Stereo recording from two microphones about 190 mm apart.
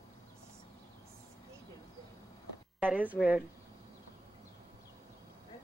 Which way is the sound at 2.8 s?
10° right (ahead or behind).